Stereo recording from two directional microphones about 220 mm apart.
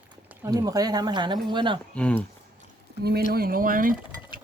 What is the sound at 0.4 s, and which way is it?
Speech, 15° right (ahead or behind).